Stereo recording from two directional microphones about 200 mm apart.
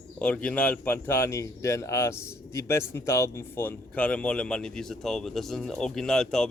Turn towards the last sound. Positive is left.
turn(degrees=0)  # may be behind; listen again after turning